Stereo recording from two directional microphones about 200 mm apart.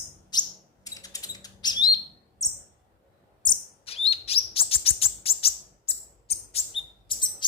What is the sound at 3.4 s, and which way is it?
Chirp, 30° left (ahead or behind).